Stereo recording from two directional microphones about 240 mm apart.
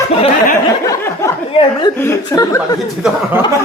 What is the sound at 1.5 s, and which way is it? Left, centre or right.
Speech, centre.